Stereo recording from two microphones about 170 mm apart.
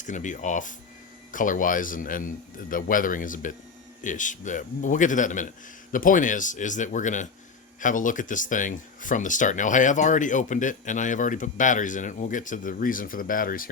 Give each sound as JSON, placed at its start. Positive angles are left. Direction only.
{"t": 0.0, "sound": "speech", "side_deg": 45}